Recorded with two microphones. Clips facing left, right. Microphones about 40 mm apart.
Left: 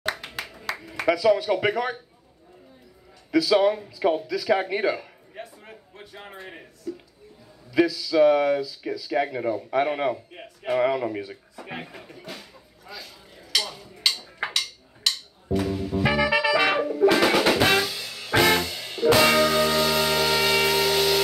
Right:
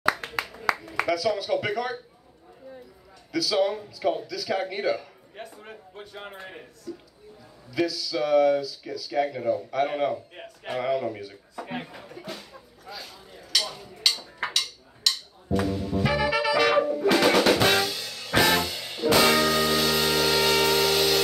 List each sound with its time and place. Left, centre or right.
0.8 s speech: centre
3.3 s speech: centre
5.7 s a man's voice: centre
6.9 s speech: centre
11.6 s speech: centre
11.9 s a sound: centre
15.0 s music: centre
16.7 s drum kit: centre